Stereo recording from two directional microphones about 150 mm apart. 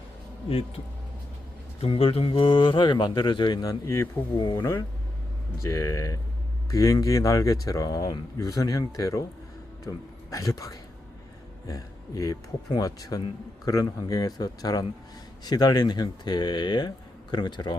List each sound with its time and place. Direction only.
1.8 s a man's voice: 35° left (ahead or behind)